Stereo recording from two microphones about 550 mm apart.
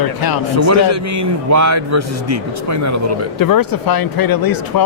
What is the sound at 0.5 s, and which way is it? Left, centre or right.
A man's voice, right.